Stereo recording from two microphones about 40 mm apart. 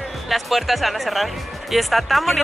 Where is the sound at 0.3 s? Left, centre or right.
Centre.